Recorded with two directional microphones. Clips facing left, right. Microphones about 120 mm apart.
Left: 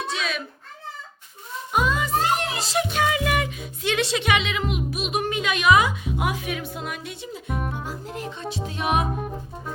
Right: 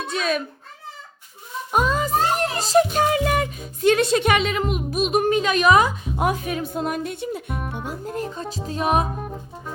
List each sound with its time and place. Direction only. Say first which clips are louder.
0.1 s a sound: right 5 dB; 45° right (ahead or behind)
1.7 s music: right 2 dB; 40° right (ahead or behind)
7.5 s speech: even; centre (ahead or behind)
7.9 s music: right 4 dB; 45° right (ahead or behind)